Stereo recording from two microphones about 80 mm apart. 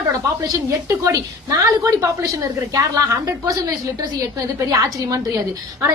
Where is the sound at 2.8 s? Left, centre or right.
Right.